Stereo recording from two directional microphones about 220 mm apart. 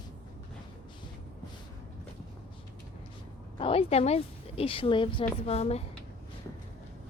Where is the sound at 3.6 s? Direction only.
25° left (ahead or behind).